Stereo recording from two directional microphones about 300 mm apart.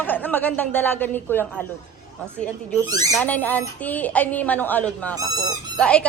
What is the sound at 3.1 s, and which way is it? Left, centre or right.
Speech, centre.